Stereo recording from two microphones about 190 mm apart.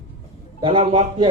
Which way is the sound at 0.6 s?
25° right (ahead or behind).